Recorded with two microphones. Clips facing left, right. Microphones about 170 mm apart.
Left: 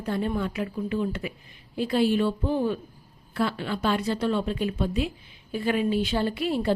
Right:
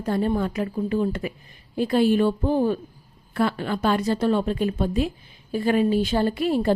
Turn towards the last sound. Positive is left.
turn(degrees=-45)  # may be behind; listen again after turning